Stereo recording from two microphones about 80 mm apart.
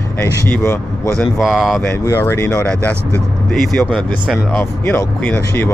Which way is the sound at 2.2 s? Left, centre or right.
Left.